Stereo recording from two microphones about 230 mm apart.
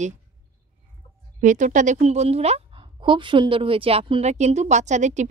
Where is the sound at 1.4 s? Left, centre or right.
Right.